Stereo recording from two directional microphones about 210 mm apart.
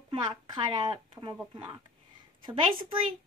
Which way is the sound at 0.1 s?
20° right (ahead or behind).